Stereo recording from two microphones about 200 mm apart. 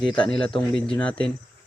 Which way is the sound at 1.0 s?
5° left (ahead or behind).